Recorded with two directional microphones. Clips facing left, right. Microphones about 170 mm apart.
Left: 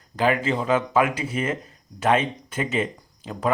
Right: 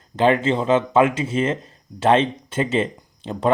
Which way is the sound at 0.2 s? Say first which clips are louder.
Right 4 dB; 25° right (ahead or behind).